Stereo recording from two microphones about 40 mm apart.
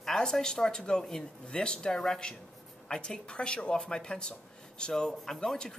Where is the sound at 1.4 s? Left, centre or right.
Left.